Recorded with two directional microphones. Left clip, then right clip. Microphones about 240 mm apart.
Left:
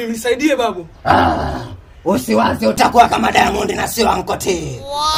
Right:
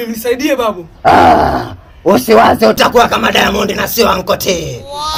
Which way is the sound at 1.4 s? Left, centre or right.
Centre.